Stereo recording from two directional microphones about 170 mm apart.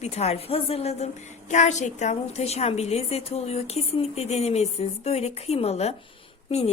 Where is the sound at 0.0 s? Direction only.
40° left (ahead or behind).